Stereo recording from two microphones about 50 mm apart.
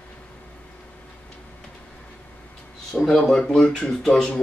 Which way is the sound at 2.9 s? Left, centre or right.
Centre.